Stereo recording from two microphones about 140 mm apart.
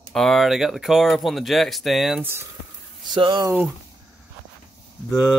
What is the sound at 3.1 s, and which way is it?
Speech, 35° right (ahead or behind).